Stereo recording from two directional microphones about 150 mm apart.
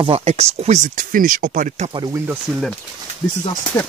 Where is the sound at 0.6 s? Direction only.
55° right (ahead or behind).